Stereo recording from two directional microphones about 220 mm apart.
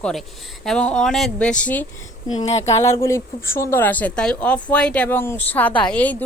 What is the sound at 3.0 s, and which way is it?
Speech, 10° left (ahead or behind).